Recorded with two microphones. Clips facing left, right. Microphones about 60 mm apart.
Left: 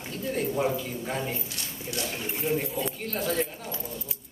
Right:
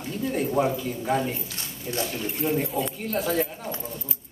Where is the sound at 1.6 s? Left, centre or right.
Right.